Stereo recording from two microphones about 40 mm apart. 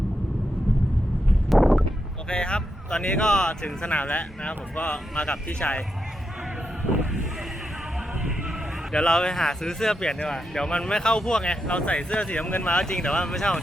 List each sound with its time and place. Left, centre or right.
1.5 s a sound: centre
2.3 s speech: left
3.8 s speech: left
4.7 s speech: left
8.9 s speech: centre
11.7 s speech: left
12.5 s speech: left
12.8 s speech: centre